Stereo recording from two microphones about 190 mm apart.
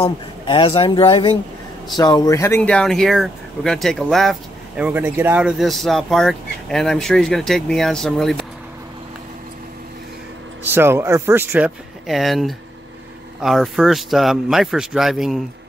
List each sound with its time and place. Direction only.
0.0 s speech: 30° left (ahead or behind); by 8.5 s centre (ahead or behind)
10.6 s speech: 10° right (ahead or behind)